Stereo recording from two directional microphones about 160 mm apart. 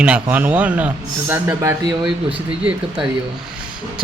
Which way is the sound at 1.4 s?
25° right (ahead or behind).